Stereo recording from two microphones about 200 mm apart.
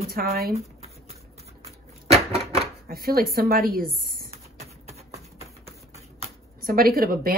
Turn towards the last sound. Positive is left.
turn(degrees=-45)  # may be behind; listen again after turning